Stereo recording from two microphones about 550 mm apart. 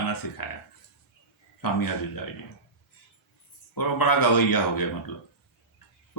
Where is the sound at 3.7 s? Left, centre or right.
Left.